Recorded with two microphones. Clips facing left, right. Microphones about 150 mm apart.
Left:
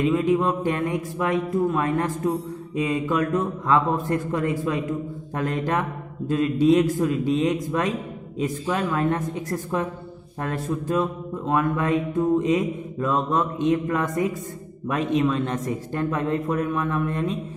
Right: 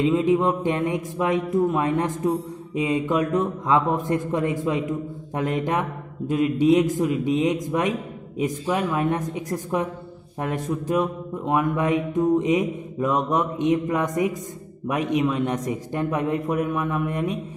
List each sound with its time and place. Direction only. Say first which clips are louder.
0.0 s speech: right 1 dB; 20° right (ahead or behind)
5.3 s music: right 1 dB; 20° right (ahead or behind)